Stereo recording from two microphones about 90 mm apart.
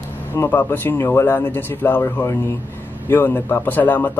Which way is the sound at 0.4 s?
25° left (ahead or behind).